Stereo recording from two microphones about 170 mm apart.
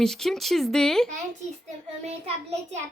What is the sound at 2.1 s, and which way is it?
Speech, 40° right (ahead or behind).